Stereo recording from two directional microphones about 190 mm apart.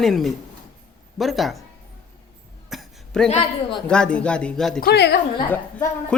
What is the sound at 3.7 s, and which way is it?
Speech, 5° left (ahead or behind).